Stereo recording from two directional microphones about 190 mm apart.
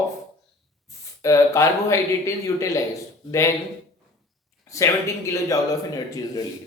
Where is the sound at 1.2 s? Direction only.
15° left (ahead or behind).